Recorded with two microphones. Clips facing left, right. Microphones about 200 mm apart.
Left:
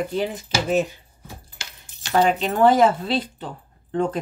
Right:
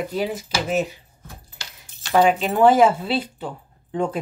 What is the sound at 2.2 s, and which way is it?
Speech, 10° right (ahead or behind).